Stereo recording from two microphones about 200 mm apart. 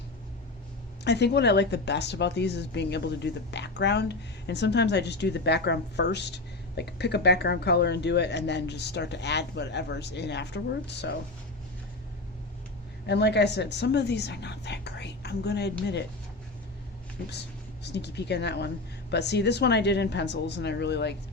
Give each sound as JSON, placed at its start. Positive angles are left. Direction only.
{"t": 1.0, "sound": "speech", "side_deg": 55}
{"t": 13.1, "sound": "speech", "side_deg": 55}
{"t": 17.8, "sound": "speech", "side_deg": 60}